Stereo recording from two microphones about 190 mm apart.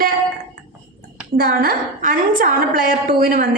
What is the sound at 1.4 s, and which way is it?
A woman's voice, 50° right (ahead or behind).